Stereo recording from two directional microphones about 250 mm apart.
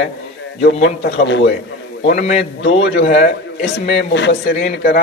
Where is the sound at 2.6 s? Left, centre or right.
Left.